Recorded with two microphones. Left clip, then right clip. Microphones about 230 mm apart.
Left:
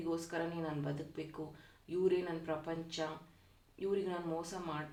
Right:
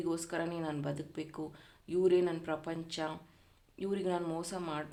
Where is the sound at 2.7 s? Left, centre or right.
Right.